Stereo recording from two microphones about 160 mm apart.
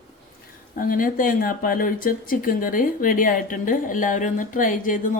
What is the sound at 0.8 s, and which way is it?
Speech, 60° left (ahead or behind).